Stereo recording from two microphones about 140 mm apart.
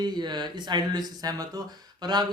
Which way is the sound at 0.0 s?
30° right (ahead or behind).